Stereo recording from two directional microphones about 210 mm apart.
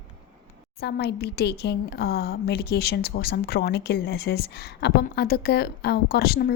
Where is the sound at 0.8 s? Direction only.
50° left (ahead or behind).